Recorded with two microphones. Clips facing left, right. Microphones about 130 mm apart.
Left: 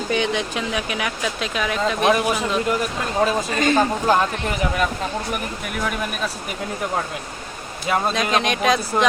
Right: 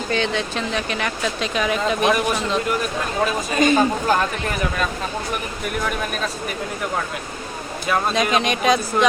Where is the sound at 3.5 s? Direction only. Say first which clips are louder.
Right 3 dB; 15° right (ahead or behind).